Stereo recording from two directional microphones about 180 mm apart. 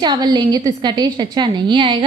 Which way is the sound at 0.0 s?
25° right (ahead or behind).